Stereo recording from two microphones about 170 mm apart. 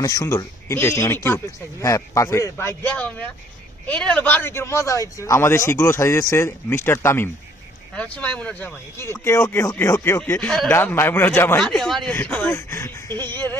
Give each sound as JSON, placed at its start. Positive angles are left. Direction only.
{"t": 0.0, "sound": "a man's voice", "side_deg": 20}